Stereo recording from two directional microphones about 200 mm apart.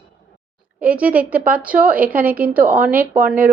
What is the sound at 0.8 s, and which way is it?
A woman's voice, 5° right (ahead or behind).